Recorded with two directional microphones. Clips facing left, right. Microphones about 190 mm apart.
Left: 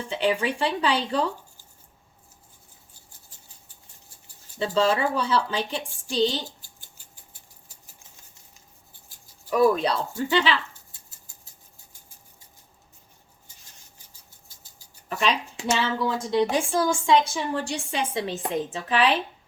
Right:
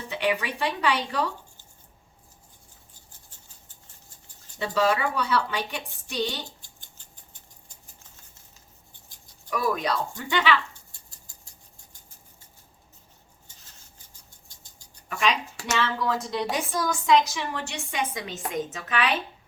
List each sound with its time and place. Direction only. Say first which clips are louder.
0.1 s a woman's voice: left 3 dB; 30° left (ahead or behind)
4.6 s a woman's voice: left 2 dB; 25° left (ahead or behind)
6.6 s rodents: even; 10° left (ahead or behind)
9.5 s speech: left 6 dB; 30° left (ahead or behind)
14.3 s rodents: even; 5° left (ahead or behind)
15.1 s a woman's voice: left 1 dB; 30° left (ahead or behind)